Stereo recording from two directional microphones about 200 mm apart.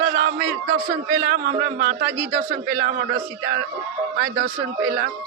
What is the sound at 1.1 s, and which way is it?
Speech, 60° right (ahead or behind).